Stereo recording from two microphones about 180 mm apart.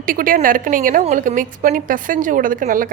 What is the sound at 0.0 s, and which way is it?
A woman's voice, 50° right (ahead or behind).